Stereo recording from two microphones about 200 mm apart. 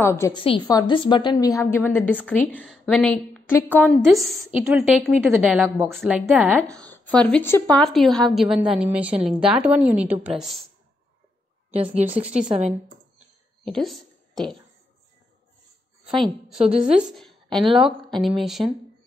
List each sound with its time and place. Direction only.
0.0 s a woman's voice: 10° left (ahead or behind)
0.3 s a woman's voice: 25° left (ahead or behind); by 6.6 s 10° right (ahead or behind)
6.7 s a woman's voice: 5° left (ahead or behind)
11.7 s speech: 30° right (ahead or behind)
12.1 s a woman's voice: 5° right (ahead or behind)
12.4 s a woman's voice: 30° right (ahead or behind)
13.7 s speech: centre (ahead or behind)
16.8 s a woman's voice: centre (ahead or behind)